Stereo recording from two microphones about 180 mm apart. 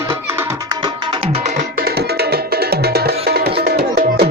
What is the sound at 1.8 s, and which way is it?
Music, 60° right (ahead or behind).